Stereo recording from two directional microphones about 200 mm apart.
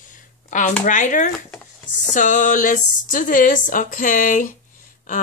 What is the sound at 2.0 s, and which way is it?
Speech, 40° left (ahead or behind).